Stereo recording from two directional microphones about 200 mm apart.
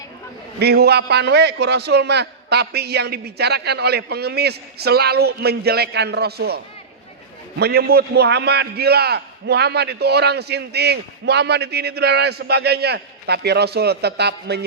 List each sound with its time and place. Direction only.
0.6 s a man's voice: 55° right (ahead or behind)
7.6 s a man's voice: 50° right (ahead or behind)